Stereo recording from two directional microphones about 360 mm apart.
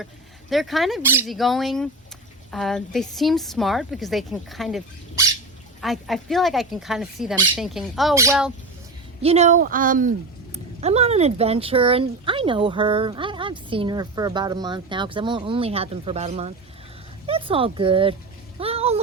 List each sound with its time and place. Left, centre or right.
0.5 s a woman's voice: centre
9.2 s speech: centre
18.6 s a sound: centre